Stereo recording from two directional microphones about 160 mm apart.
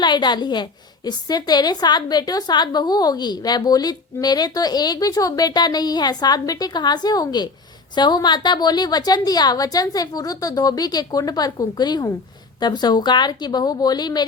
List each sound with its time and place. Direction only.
0.0 s a woman's voice: 25° left (ahead or behind)